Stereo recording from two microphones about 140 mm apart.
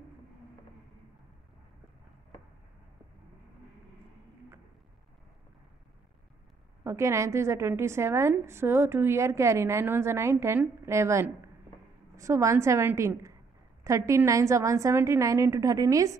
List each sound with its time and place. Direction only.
6.8 s a woman's voice: 20° right (ahead or behind)